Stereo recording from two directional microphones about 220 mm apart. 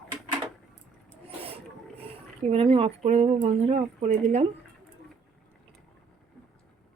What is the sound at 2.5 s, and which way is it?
Speech, 25° right (ahead or behind).